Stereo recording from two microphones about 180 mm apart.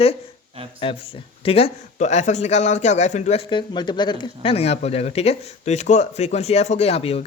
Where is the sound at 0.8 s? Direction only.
30° left (ahead or behind).